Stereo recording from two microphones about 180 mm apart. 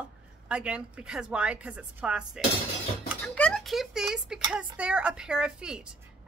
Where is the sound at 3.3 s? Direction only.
5° left (ahead or behind).